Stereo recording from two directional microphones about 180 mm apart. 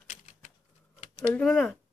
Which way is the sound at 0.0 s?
45° left (ahead or behind).